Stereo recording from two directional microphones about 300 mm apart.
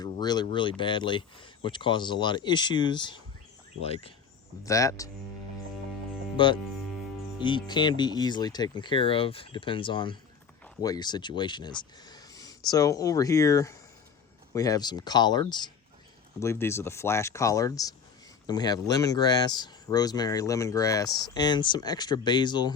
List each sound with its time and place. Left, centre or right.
0.0 s speech: centre
4.6 s speech: centre
6.3 s speech: centre